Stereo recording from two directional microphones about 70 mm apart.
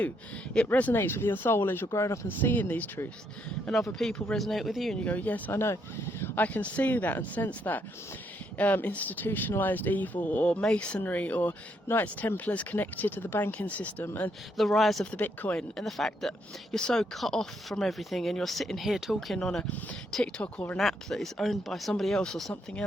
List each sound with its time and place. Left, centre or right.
0.7 s speech: left
1.9 s speech: left
2.2 s speech: left
3.7 s speech: centre
5.0 s speech: left
14.5 s speech: centre
15.1 s speech: left
15.5 s speech: centre
19.4 s speech: centre
20.7 s speech: centre